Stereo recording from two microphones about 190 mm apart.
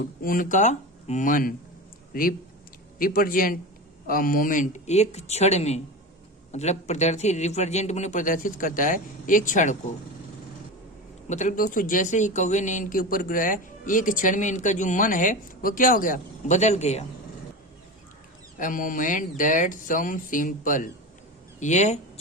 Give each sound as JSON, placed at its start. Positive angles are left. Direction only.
{"t": 0.2, "sound": "speech", "side_deg": 45}
{"t": 3.0, "sound": "a man's voice", "side_deg": 50}
{"t": 11.3, "sound": "speech", "side_deg": 40}
{"t": 18.6, "sound": "a man's voice", "side_deg": 45}